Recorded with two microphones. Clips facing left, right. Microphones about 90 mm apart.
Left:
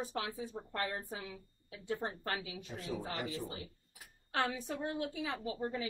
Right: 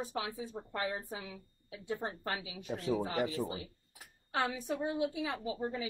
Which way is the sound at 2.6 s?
75° right (ahead or behind).